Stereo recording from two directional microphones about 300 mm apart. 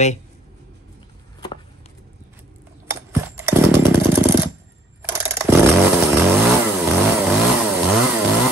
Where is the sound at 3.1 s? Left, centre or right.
Centre.